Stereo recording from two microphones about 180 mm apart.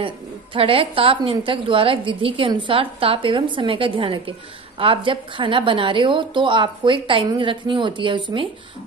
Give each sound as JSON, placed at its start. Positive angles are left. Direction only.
{"t": 0.6, "sound": "a woman's voice", "side_deg": -30}